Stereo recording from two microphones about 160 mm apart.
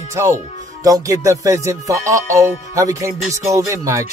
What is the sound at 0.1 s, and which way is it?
Music, 15° right (ahead or behind).